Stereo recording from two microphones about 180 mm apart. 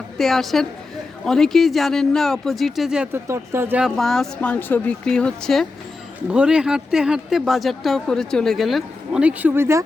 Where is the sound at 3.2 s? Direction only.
15° right (ahead or behind).